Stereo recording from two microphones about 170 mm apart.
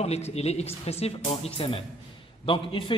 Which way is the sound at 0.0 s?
40° left (ahead or behind).